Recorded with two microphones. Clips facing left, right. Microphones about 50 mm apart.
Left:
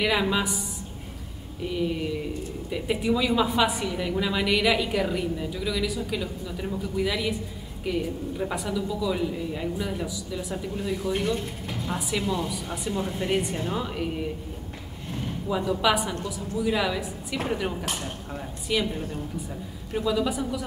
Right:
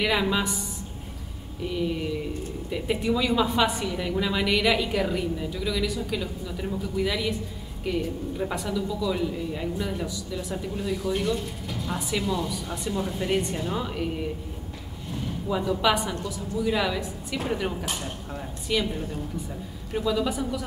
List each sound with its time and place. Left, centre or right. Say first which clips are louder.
0.0 s speech: even; centre
15.4 s speech: even; centre